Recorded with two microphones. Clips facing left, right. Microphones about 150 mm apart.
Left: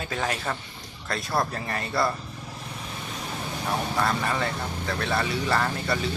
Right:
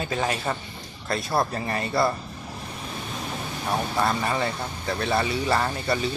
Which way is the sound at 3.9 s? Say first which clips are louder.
Right 2 dB; 15° right (ahead or behind).